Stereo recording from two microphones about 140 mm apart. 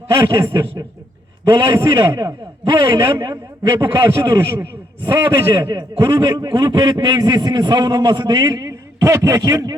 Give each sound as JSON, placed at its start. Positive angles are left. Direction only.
{"t": 0.1, "sound": "a man's voice", "side_deg": -25}